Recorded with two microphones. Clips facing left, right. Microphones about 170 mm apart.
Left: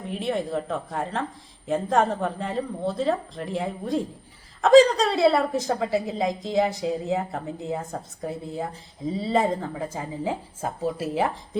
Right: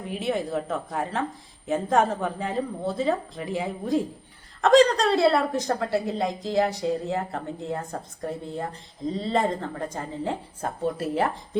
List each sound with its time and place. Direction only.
0.0 s a woman's voice: centre (ahead or behind)